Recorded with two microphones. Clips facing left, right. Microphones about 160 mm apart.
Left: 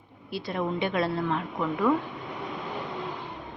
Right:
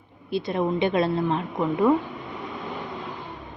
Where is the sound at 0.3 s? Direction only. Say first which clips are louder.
Right 5 dB; 20° right (ahead or behind).